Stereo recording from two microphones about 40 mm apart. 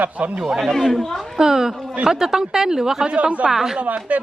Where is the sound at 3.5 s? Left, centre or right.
Centre.